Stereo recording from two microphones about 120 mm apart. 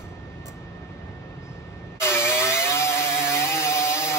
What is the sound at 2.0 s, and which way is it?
Vehicle, 20° left (ahead or behind).